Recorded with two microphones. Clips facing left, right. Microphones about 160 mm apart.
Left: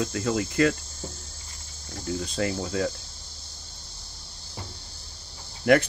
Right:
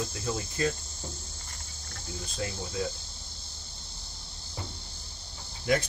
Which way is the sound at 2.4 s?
65° left (ahead or behind).